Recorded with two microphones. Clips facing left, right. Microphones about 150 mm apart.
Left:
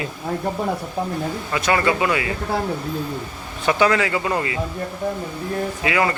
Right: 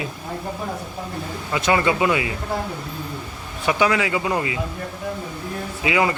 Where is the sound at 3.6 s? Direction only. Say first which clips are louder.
Left 2 dB; 10° right (ahead or behind).